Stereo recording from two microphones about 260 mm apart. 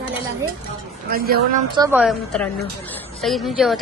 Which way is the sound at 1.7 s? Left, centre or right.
Centre.